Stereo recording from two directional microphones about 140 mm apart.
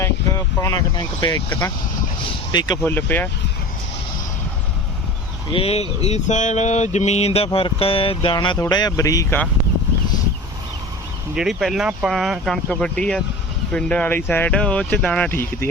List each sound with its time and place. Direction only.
0.9 s speech: 30° left (ahead or behind)
2.5 s speech: 30° left (ahead or behind)
2.8 s speech: 15° left (ahead or behind)
5.5 s mantra: 45° left (ahead or behind)
8.7 s speech: 25° left (ahead or behind)
11.3 s speech: centre (ahead or behind); by 15.7 s 15° left (ahead or behind)